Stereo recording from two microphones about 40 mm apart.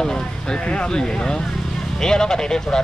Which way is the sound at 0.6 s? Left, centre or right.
Left.